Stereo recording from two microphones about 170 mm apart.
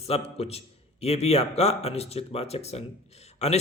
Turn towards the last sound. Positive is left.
turn(degrees=40)  # may be behind; listen again after turning